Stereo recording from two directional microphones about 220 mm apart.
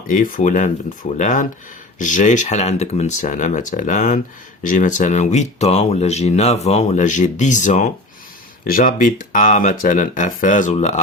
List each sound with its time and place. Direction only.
0.1 s speech: 40° left (ahead or behind)